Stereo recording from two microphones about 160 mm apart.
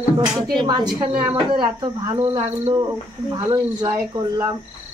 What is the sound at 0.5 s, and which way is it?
Speech, 25° right (ahead or behind).